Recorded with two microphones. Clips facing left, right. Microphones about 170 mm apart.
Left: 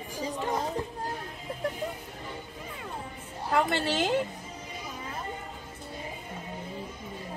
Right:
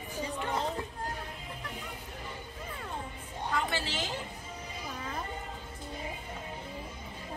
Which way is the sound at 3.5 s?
60° left (ahead or behind).